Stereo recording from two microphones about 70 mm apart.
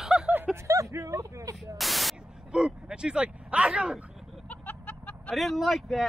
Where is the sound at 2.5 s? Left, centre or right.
Centre.